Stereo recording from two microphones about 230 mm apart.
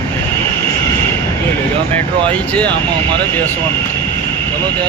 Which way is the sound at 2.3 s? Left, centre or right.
Centre.